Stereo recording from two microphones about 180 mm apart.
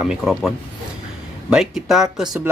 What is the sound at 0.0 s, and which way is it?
Speech, centre (ahead or behind).